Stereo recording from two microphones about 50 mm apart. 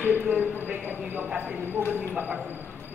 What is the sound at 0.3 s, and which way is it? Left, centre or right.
A woman's voice, right.